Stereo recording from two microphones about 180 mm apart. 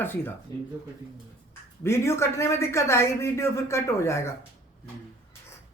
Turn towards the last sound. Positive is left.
turn(degrees=15)  # may be behind; listen again after turning